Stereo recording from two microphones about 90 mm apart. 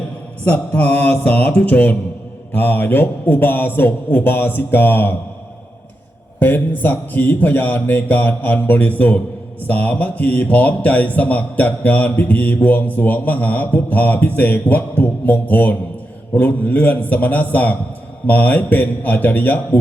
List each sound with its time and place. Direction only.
0.4 s a man's voice: 20° left (ahead or behind)
6.4 s a man's voice: 20° left (ahead or behind)